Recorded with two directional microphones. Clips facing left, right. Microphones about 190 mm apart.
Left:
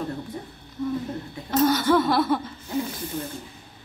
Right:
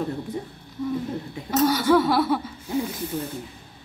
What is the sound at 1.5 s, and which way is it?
Speech, 10° right (ahead or behind).